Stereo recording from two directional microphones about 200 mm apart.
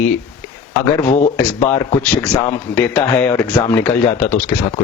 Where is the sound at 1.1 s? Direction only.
35° left (ahead or behind).